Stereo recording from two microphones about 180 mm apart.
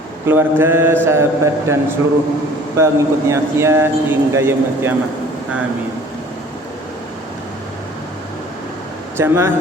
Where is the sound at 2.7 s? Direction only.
15° right (ahead or behind).